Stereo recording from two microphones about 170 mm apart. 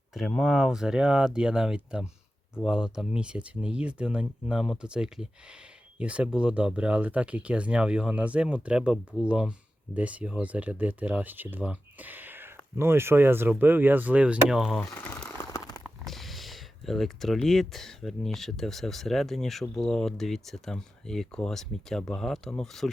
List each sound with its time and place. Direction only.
0.1 s speech: centre (ahead or behind)
14.8 s a sound: 10° left (ahead or behind)
15.8 s speech: centre (ahead or behind)